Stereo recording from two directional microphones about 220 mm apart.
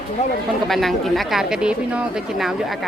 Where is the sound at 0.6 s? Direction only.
Centre (ahead or behind).